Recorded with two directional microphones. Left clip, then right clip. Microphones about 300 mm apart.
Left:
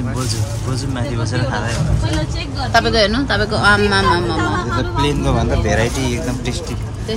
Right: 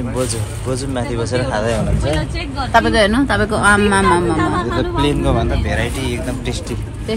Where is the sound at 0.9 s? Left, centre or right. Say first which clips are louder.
Right 4 dB; centre.